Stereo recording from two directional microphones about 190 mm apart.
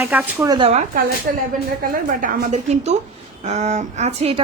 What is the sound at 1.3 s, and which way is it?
A man's voice, 55° right (ahead or behind).